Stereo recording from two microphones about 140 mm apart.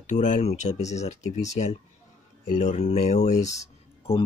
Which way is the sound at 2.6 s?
55° left (ahead or behind).